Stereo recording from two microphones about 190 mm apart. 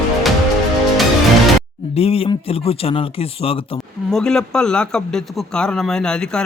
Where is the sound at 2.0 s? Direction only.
30° left (ahead or behind).